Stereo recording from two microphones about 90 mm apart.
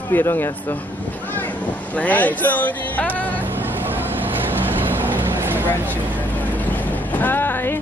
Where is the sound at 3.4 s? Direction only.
20° right (ahead or behind).